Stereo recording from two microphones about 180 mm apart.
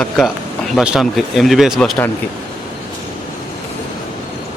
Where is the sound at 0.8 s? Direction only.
Centre (ahead or behind).